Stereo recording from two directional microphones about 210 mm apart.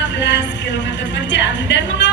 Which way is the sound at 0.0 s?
60° left (ahead or behind).